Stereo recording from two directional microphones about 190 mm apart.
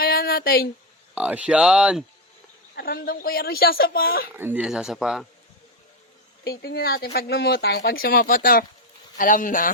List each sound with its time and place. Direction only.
0.0 s a sound: 50° left (ahead or behind)
1.1 s speech: 5° right (ahead or behind)
2.7 s speech: 50° left (ahead or behind)
4.4 s speech: 10° right (ahead or behind)
6.4 s speech: 55° left (ahead or behind)